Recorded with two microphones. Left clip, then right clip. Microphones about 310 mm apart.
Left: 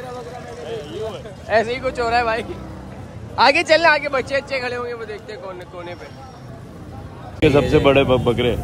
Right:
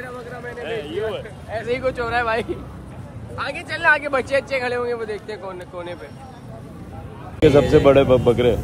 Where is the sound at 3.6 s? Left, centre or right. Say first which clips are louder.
Left 4 dB; centre.